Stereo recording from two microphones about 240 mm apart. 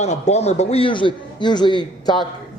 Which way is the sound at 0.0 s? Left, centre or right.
Left.